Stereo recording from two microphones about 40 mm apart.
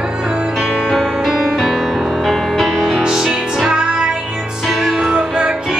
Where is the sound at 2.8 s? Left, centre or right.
Centre.